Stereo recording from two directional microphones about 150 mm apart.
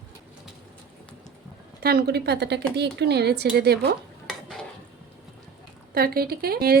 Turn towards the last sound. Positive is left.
turn(degrees=-90)